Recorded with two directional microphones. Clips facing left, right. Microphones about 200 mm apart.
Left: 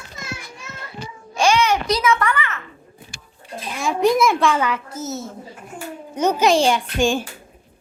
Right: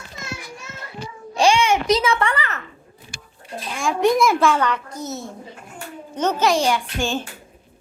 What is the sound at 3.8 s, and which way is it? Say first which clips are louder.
A child's voice: even; centre (ahead or behind).